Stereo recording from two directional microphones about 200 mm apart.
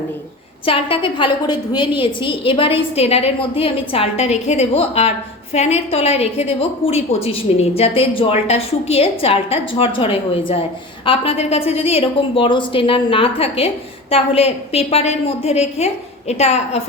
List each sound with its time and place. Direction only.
0.6 s a woman's voice: 25° left (ahead or behind)